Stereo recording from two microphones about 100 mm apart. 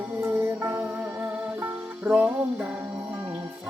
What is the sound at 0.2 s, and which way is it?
Music, 25° right (ahead or behind).